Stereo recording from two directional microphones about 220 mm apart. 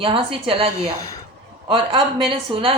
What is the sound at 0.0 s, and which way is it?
Speech, 25° right (ahead or behind).